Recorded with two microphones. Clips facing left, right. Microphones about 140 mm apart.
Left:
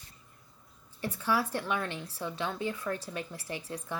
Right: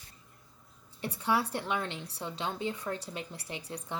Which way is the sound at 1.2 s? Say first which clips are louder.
Even; 25° right (ahead or behind).